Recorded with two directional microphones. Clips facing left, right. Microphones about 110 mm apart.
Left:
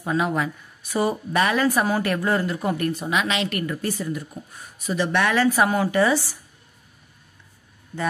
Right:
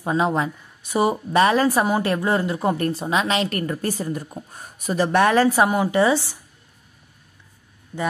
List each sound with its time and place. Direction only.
0.0 s a woman's voice: 25° right (ahead or behind)
5.7 s speech: 20° right (ahead or behind)